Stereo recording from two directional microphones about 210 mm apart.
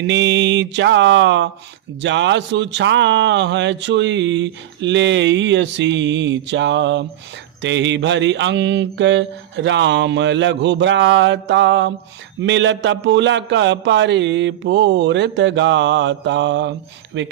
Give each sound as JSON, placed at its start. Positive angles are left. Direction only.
{"t": 0.1, "sound": "speech", "side_deg": -55}